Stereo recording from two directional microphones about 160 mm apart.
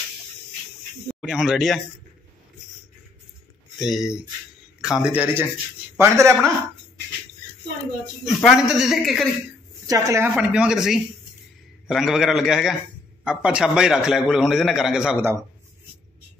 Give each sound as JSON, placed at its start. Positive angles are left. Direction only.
{"t": 1.0, "sound": "speech", "side_deg": -5}
{"t": 3.7, "sound": "a man's voice", "side_deg": 0}
{"t": 8.3, "sound": "a man's voice", "side_deg": 0}
{"t": 9.8, "sound": "a woman's voice", "side_deg": -20}
{"t": 10.3, "sound": "a man's voice", "side_deg": -5}